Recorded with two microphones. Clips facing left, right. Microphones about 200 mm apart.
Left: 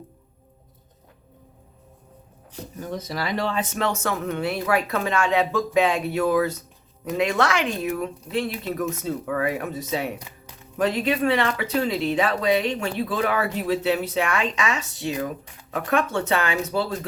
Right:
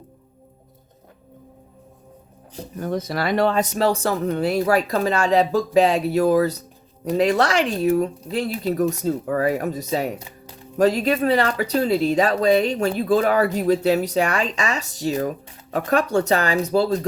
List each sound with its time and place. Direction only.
2.8 s speech: 60° right (ahead or behind)
3.6 s speech: 35° right (ahead or behind)